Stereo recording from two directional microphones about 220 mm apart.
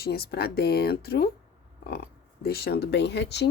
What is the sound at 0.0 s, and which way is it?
Speech, 45° left (ahead or behind).